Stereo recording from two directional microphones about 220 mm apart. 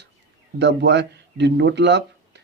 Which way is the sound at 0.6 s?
50° right (ahead or behind).